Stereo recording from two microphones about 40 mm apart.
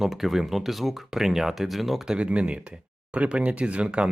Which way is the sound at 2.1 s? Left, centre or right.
Right.